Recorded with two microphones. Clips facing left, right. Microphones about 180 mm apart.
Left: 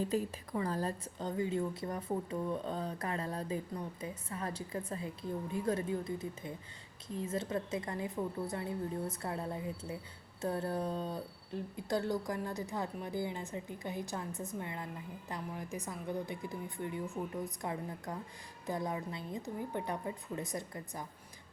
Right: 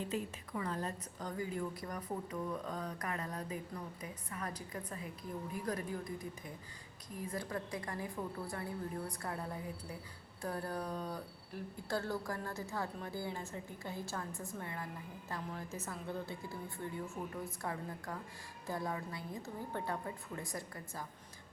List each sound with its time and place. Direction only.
0.0 s a woman's voice: 35° left (ahead or behind); by 21.0 s 20° left (ahead or behind)